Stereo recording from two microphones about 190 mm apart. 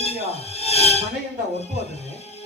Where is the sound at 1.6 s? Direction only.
35° left (ahead or behind).